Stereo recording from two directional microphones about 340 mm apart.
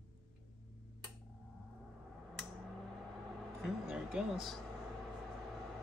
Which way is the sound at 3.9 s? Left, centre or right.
Centre.